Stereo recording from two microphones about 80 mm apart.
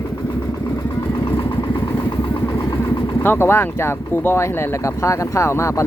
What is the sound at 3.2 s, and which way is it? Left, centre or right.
Speech, left.